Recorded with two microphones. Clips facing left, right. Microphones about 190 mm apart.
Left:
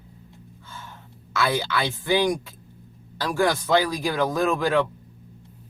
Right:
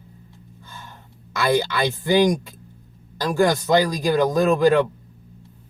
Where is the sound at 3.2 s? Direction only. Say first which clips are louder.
Right 4 dB; 15° right (ahead or behind).